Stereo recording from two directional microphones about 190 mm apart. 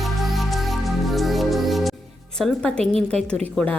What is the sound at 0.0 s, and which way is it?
Music, centre (ahead or behind).